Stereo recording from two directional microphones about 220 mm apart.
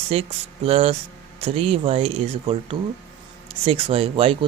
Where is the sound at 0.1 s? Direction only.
25° right (ahead or behind).